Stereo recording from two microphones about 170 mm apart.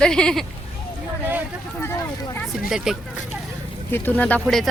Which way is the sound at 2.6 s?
5° right (ahead or behind).